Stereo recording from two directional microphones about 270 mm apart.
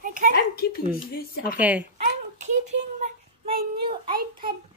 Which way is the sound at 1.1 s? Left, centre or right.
Left.